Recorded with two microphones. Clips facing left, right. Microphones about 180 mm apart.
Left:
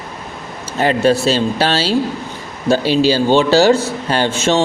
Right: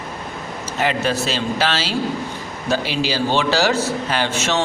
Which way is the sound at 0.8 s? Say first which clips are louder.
Left 7 dB; 30° left (ahead or behind).